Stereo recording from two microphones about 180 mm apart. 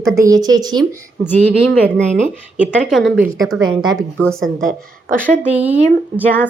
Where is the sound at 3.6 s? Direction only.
25° right (ahead or behind).